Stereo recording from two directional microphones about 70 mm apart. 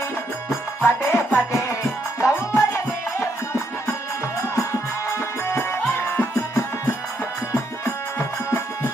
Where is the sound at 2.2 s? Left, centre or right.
Left.